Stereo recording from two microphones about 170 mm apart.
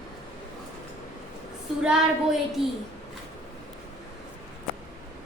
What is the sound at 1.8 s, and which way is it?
Speech, centre (ahead or behind).